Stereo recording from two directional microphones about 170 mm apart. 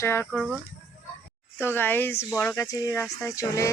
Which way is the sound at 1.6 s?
10° left (ahead or behind).